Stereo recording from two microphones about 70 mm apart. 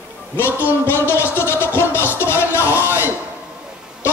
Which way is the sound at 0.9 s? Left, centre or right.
Left.